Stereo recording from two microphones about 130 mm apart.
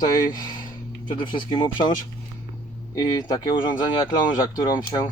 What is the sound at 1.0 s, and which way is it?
Speech, 40° left (ahead or behind).